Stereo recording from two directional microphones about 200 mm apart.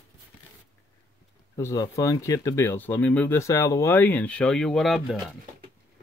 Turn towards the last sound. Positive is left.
turn(degrees=0)  # may be behind; listen again after turning